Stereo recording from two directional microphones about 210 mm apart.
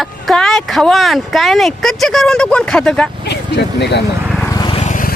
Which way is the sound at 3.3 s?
55° left (ahead or behind).